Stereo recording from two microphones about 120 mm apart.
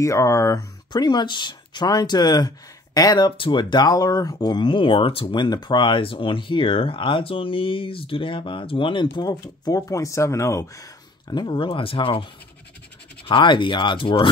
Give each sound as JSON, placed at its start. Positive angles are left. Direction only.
{"t": 0.0, "sound": "speech", "side_deg": 25}
{"t": 13.3, "sound": "speech", "side_deg": 40}